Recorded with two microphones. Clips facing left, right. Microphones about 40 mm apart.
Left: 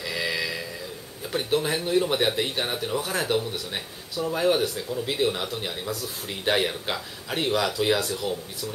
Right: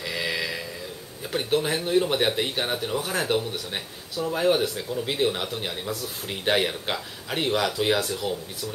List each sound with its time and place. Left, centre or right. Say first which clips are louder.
0.0 s mantra: even; centre
1.3 s speech: even; centre